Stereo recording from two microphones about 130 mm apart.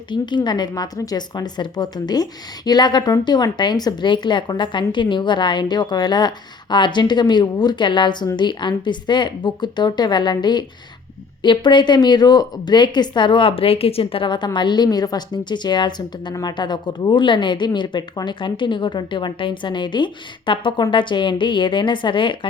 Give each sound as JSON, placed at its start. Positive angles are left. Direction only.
{"t": 0.1, "sound": "a woman's voice", "side_deg": 35}